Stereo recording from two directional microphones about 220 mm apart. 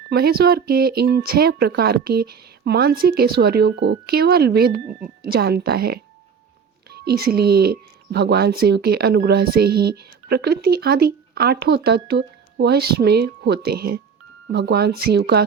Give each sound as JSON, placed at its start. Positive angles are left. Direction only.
{"t": 0.1, "sound": "speech", "side_deg": -45}